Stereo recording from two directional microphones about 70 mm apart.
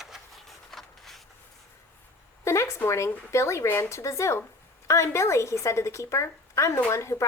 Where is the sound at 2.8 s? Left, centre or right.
Left.